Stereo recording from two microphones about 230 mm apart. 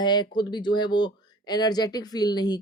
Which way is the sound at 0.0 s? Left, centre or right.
Centre.